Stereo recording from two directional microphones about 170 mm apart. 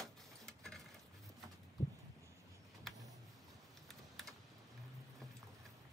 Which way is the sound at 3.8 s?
Centre (ahead or behind).